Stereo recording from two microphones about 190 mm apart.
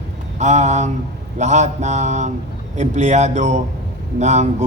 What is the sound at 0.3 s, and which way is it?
A man's voice, 40° right (ahead or behind).